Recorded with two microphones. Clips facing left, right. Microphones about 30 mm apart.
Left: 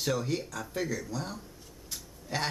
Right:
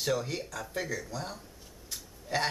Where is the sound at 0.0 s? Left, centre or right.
Centre.